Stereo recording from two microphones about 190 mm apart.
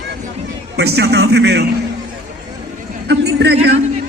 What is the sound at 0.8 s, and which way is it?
Speech, 60° right (ahead or behind).